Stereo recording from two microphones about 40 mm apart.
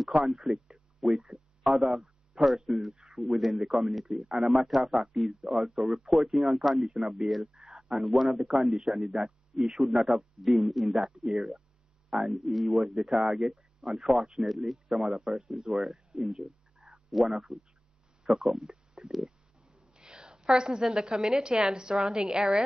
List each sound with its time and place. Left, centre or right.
0.0 s a man's voice: centre
19.2 s a sound: centre
20.9 s a woman's voice: centre